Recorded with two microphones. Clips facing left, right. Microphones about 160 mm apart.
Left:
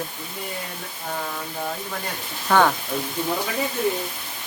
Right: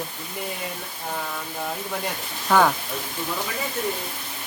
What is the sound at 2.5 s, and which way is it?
Speech, 5° right (ahead or behind).